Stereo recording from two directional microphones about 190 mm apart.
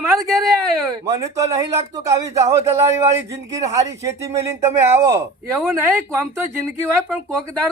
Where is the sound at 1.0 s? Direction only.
15° right (ahead or behind).